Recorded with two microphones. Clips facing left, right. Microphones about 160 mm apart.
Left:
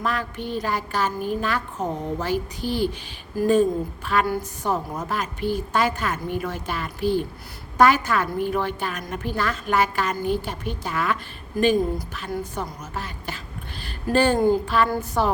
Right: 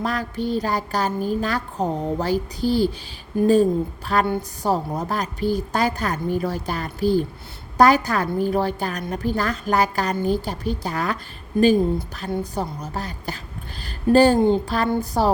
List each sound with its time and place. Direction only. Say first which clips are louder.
0.0 s a woman's voice: right 3 dB; 35° right (ahead or behind)
12.3 s a woman's voice: right 4 dB; 35° right (ahead or behind)
13.8 s a sound: right 5 dB; 40° right (ahead or behind)
14.3 s speech: right 1 dB; 25° right (ahead or behind)
14.6 s a woman's voice: even; 35° right (ahead or behind)